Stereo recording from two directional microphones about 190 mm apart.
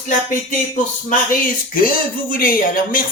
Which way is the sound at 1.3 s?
45° left (ahead or behind).